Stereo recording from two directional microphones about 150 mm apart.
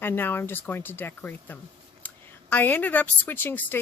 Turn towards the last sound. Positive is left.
turn(degrees=15)  # may be behind; listen again after turning